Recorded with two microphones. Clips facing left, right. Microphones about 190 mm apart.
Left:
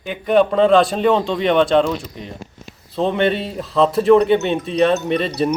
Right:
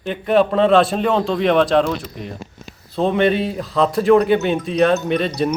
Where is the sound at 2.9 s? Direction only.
Centre (ahead or behind).